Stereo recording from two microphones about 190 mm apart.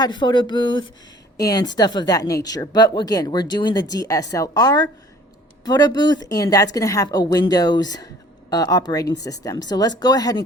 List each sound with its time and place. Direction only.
0.0 s a woman's voice: 25° left (ahead or behind)